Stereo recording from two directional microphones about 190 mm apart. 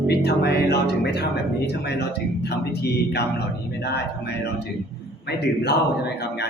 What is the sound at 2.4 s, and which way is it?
Speech, 60° left (ahead or behind).